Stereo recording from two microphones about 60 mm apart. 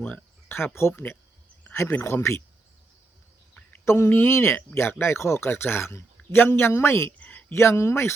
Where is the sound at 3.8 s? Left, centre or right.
Left.